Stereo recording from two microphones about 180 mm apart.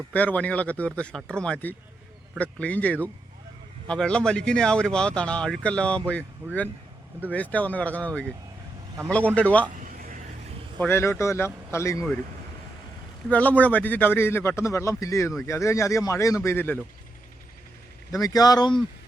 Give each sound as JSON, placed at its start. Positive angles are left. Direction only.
{"t": 0.1, "sound": "speech", "side_deg": 10}
{"t": 9.8, "sound": "a sound", "side_deg": -50}
{"t": 10.8, "sound": "speech", "side_deg": 15}
{"t": 13.2, "sound": "speech", "side_deg": 10}
{"t": 18.1, "sound": "speech", "side_deg": 20}